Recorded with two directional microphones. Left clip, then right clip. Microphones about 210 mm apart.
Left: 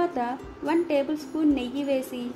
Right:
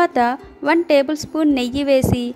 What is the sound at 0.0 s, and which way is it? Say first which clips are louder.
A woman's voice: right 11 dB; 50° right (ahead or behind).